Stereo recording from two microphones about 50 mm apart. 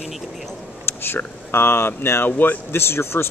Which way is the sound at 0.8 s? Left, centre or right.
Left.